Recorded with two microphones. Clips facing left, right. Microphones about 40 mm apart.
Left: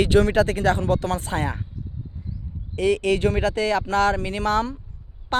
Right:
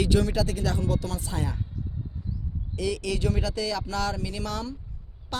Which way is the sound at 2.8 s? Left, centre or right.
Left.